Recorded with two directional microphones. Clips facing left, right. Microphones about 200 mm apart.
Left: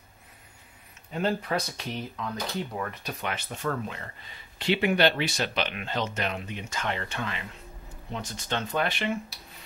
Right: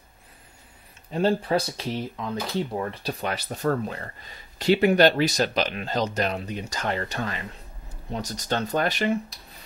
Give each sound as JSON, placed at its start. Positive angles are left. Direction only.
{"t": 1.1, "sound": "speech", "side_deg": -30}